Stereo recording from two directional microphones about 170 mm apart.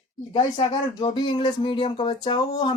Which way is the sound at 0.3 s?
25° left (ahead or behind).